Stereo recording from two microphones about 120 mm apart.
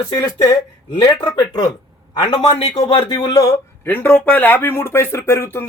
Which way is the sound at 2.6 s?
65° left (ahead or behind).